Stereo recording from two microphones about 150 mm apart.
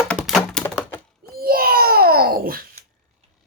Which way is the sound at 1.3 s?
80° right.